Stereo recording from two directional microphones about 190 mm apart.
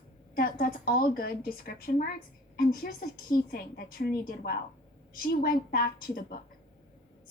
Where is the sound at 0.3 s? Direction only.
50° left (ahead or behind).